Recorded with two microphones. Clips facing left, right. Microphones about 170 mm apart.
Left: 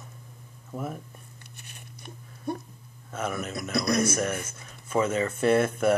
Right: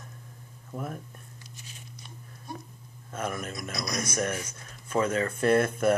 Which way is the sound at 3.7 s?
60° left (ahead or behind).